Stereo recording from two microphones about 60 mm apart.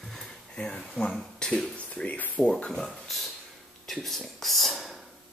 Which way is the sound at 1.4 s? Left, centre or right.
Centre.